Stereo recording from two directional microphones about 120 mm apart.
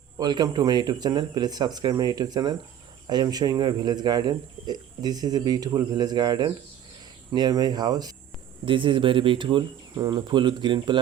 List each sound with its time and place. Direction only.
0.2 s speech: 35° right (ahead or behind)
8.6 s speech: 45° right (ahead or behind)